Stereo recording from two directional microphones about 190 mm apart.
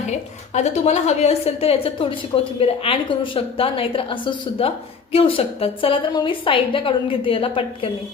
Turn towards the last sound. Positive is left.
turn(degrees=30)  # may be behind; listen again after turning